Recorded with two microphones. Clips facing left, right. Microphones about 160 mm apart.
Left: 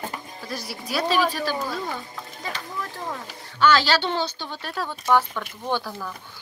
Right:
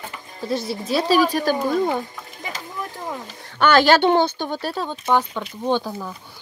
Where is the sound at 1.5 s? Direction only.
50° right (ahead or behind).